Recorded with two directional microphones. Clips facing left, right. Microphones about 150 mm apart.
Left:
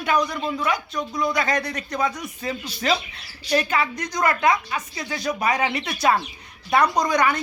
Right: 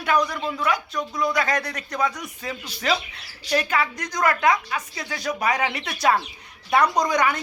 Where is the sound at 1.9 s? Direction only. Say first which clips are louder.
Even; 10° left (ahead or behind).